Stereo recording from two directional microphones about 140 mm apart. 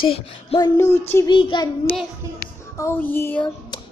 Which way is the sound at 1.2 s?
35° left (ahead or behind).